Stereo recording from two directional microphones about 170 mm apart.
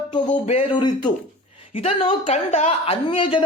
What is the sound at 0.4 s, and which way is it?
Speech, 30° left (ahead or behind).